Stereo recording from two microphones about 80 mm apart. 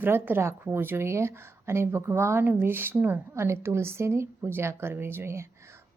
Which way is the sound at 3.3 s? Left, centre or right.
Right.